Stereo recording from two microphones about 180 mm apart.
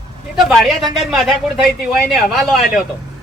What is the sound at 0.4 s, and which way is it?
Speech, centre (ahead or behind).